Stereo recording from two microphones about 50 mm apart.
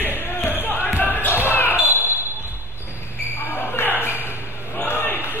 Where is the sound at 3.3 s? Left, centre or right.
Left.